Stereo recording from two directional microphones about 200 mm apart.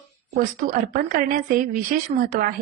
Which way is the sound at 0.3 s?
45° right (ahead or behind).